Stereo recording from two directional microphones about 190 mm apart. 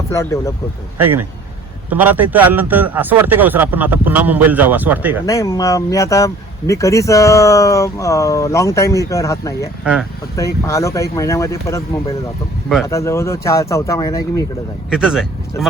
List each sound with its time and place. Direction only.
0.1 s speech: 15° left (ahead or behind)
0.9 s a man's voice: 10° right (ahead or behind)
5.2 s speech: 15° left (ahead or behind)
9.8 s speech: centre (ahead or behind)
10.3 s speech: 15° left (ahead or behind)
12.9 s speech: 15° left (ahead or behind)
14.8 s speech: 5° right (ahead or behind)